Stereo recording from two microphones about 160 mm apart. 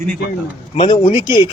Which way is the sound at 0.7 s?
25° left (ahead or behind).